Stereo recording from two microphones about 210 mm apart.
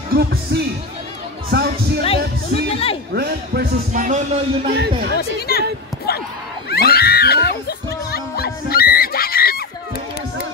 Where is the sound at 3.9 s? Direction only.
35° right (ahead or behind).